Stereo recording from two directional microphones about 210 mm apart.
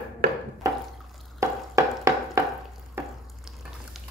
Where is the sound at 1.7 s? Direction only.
15° right (ahead or behind).